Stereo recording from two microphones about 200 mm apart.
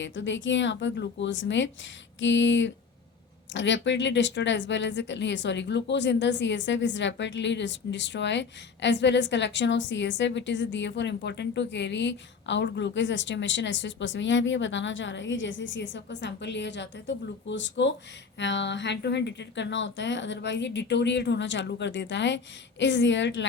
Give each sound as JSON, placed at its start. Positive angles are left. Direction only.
{"t": 0.0, "sound": "a woman's voice", "side_deg": 70}